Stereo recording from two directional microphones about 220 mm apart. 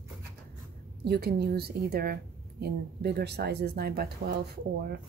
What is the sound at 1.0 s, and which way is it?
A woman's voice, 45° right (ahead or behind).